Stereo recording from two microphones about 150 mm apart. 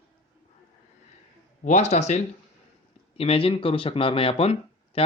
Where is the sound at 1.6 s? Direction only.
50° left (ahead or behind).